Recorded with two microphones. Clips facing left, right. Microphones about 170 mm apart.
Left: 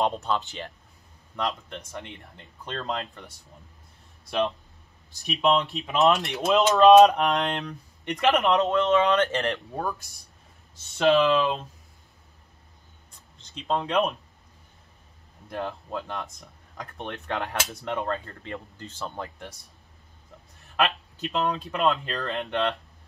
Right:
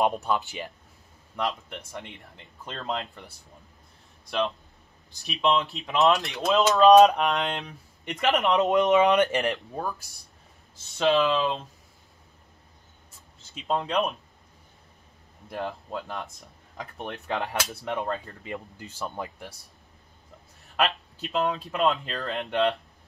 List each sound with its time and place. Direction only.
0.0 s speech: 10° right (ahead or behind)
5.1 s speech: centre (ahead or behind)
8.6 s speech: 15° right (ahead or behind)
10.9 s speech: centre (ahead or behind)
13.4 s speech: 5° right (ahead or behind)
15.5 s speech: centre (ahead or behind)
17.8 s speech: 15° right (ahead or behind)
20.6 s speech: centre (ahead or behind)